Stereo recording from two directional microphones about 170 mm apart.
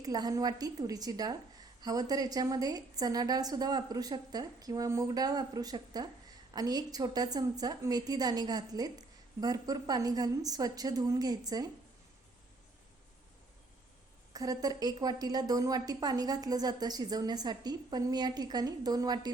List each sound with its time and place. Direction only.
0.0 s a woman's voice: 20° right (ahead or behind)
14.3 s a woman's voice: 20° right (ahead or behind)